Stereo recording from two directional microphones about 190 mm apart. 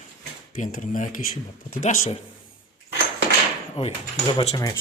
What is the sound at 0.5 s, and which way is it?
Speech, 40° left (ahead or behind).